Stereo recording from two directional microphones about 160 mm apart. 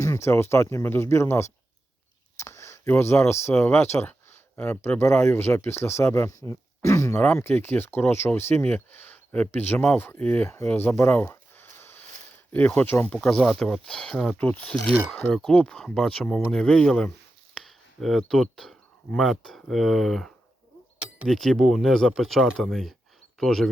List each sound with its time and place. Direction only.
0.0 s speech: 15° left (ahead or behind); by 23.6 s centre (ahead or behind)